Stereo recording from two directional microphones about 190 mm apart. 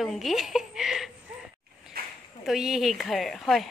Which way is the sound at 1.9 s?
50° right (ahead or behind).